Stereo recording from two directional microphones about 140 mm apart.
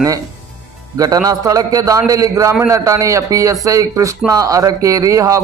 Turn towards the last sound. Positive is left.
turn(degrees=-25)  # may be behind; listen again after turning